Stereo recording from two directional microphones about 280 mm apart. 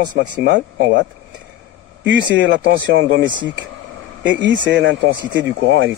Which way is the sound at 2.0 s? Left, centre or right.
Right.